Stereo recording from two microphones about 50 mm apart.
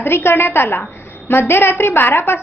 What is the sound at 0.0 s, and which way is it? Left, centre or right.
A woman's voice, left.